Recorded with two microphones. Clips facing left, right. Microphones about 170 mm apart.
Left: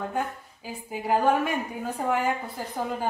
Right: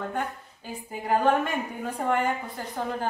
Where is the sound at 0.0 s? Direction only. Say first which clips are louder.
Left 1 dB; 5° left (ahead or behind).